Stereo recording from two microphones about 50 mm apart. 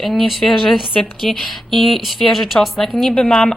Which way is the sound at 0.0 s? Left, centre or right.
Centre.